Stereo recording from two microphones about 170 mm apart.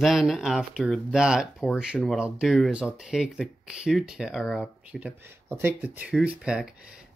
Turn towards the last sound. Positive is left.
turn(degrees=-5)  # may be behind; listen again after turning